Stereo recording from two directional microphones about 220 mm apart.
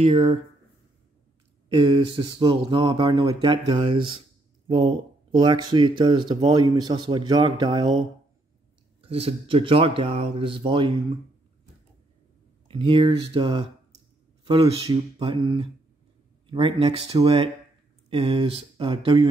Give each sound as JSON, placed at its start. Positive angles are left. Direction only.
{"t": 0.0, "sound": "speech", "side_deg": -25}
{"t": 1.7, "sound": "speech", "side_deg": -20}
{"t": 9.0, "sound": "speech", "side_deg": -25}
{"t": 12.6, "sound": "speech", "side_deg": -25}